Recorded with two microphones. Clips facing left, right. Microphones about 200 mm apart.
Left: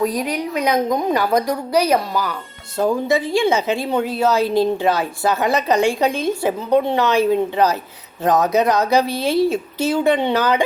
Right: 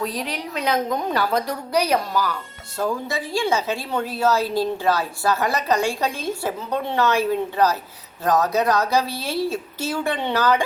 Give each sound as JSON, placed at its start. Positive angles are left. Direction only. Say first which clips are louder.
{"t": 0.0, "sound": "a woman's voice", "louder": "left 7 dB", "side_deg": 15}